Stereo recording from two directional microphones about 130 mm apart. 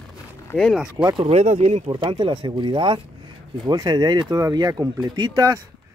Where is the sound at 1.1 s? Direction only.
50° right (ahead or behind).